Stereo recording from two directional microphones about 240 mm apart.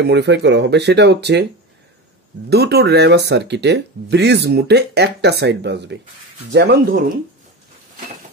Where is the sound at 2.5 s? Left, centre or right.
Right.